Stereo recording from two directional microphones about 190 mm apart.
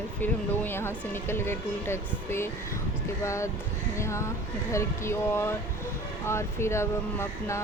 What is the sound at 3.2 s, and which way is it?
Speech, 15° left (ahead or behind).